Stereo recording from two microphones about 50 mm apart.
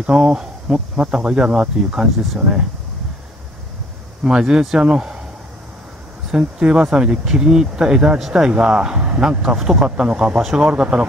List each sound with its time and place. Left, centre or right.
0.0 s speech: centre
4.2 s speech: centre
6.3 s speech: centre
9.6 s speech: centre
9.8 s speech: right